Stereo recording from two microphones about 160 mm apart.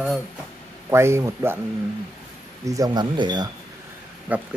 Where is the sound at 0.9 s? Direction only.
15° right (ahead or behind).